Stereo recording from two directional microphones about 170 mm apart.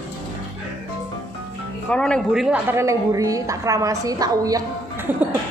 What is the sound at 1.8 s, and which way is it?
A woman's voice, 5° left (ahead or behind).